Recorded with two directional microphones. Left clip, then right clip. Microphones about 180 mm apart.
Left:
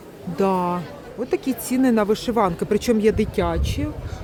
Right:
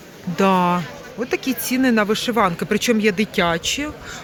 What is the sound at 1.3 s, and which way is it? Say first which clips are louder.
Speech: right 1 dB; 10° left (ahead or behind).